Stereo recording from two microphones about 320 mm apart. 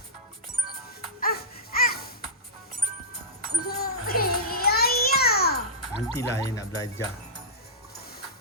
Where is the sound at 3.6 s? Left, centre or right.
Left.